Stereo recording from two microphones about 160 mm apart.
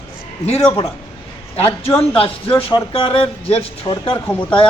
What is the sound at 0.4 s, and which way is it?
Speech, 40° left (ahead or behind).